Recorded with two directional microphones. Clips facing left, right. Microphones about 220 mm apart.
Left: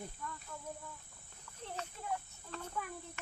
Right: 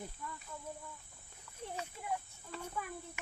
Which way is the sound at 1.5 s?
10° right (ahead or behind).